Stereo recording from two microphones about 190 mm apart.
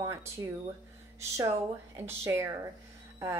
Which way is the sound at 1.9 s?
10° right (ahead or behind).